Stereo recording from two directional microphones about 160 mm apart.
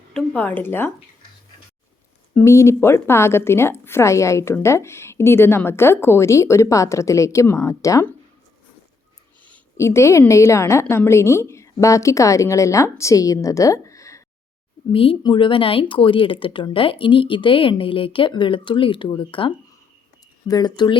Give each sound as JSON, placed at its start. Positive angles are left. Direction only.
{"t": 0.1, "sound": "a woman's voice", "side_deg": 5}
{"t": 2.3, "sound": "a woman's voice", "side_deg": 15}
{"t": 9.5, "sound": "a woman's voice", "side_deg": 15}
{"t": 14.9, "sound": "a woman's voice", "side_deg": 35}